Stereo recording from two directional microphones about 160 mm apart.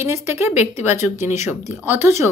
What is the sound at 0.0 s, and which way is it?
A woman's voice, 15° right (ahead or behind).